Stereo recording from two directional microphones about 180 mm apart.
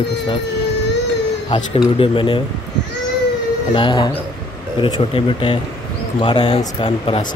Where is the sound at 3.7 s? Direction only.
25° left (ahead or behind).